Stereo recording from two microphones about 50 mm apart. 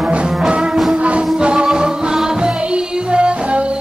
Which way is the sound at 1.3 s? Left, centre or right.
Centre.